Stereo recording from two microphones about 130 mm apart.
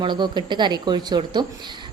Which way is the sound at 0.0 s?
35° right (ahead or behind).